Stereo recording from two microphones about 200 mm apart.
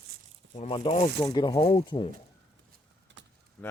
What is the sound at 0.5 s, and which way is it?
Speech, 30° left (ahead or behind).